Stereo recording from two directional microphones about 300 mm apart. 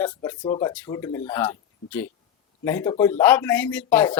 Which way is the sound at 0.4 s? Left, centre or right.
Centre.